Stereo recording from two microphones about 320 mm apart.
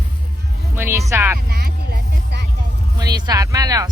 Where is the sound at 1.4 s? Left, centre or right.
Right.